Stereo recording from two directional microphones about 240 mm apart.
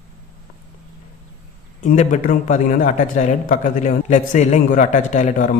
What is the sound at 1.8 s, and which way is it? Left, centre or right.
A man's voice, left.